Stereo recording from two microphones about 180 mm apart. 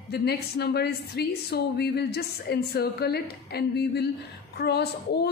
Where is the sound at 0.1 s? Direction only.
65° left (ahead or behind).